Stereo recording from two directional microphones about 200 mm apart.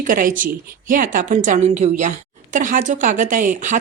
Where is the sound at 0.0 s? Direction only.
45° right (ahead or behind).